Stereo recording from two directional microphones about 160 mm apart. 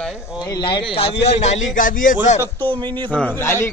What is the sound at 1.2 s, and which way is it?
Speech, 45° left (ahead or behind).